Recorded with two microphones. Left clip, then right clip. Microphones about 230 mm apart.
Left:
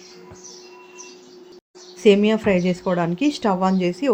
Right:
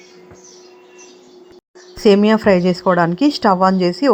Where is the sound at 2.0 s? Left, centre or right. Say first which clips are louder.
Right 4 dB; right.